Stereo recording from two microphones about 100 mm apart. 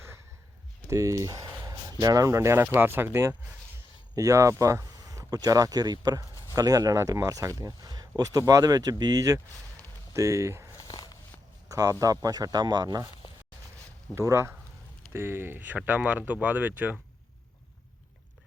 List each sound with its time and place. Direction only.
0.9 s speech: 30° right (ahead or behind)
10.8 s a sound: 45° left (ahead or behind)
11.7 s speech: 35° right (ahead or behind)
14.2 s speech: 25° right (ahead or behind)